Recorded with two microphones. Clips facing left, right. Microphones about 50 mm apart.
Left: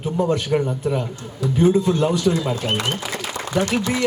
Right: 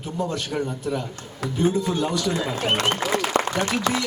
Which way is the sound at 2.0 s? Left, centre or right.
Left.